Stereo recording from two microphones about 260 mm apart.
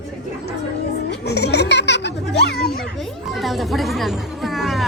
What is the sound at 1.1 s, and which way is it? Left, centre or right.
Speech, left.